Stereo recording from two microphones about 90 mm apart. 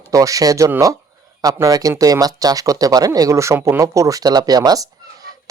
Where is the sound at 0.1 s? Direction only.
40° right (ahead or behind).